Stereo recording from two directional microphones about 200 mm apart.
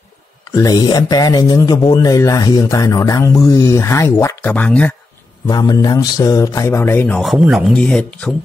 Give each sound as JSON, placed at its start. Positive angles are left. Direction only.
{"t": 0.5, "sound": "speech", "side_deg": 20}
{"t": 5.5, "sound": "speech", "side_deg": 20}